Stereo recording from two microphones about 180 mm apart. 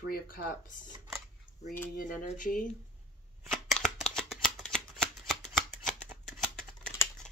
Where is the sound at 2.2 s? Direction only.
45° left (ahead or behind).